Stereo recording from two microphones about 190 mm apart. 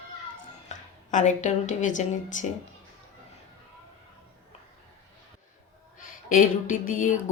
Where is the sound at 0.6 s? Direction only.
40° left (ahead or behind).